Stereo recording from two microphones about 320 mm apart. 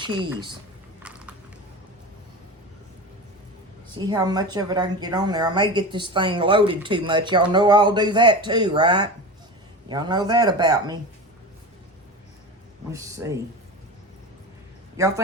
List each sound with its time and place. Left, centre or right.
0.2 s a woman's voice: centre
1.0 s a sound: centre
3.9 s a woman's voice: centre
12.9 s a woman's voice: centre
14.9 s speech: centre